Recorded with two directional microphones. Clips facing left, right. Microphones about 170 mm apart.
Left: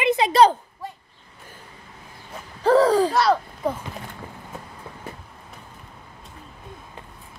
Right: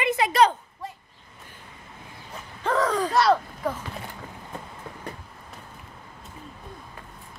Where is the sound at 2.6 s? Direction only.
35° left (ahead or behind).